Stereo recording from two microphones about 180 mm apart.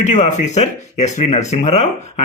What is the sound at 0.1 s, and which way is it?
A man's voice, 40° left (ahead or behind).